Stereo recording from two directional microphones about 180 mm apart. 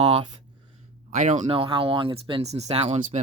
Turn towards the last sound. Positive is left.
turn(degrees=-35)  # may be behind; listen again after turning